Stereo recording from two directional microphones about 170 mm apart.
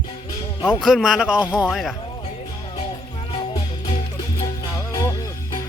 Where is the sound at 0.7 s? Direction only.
Centre (ahead or behind).